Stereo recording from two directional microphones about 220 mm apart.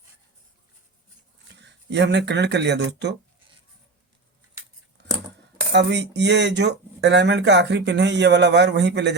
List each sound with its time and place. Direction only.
1.5 s speech: 50° right (ahead or behind)
5.0 s scissors: 50° right (ahead or behind)
5.7 s speech: 55° right (ahead or behind)